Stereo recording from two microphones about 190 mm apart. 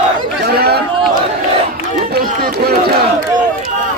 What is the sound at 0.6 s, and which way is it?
Chatter, 55° right (ahead or behind).